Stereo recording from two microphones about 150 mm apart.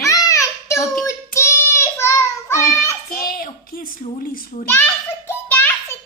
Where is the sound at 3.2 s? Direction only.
75° left (ahead or behind).